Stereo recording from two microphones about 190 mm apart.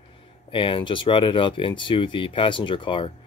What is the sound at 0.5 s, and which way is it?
Speech, 25° left (ahead or behind).